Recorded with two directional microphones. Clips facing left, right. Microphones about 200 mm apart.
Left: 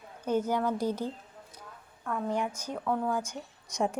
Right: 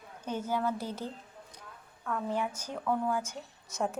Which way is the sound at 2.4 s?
10° right (ahead or behind).